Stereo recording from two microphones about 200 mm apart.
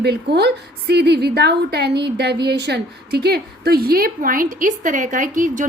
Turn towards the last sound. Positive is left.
turn(degrees=-40)  # may be behind; listen again after turning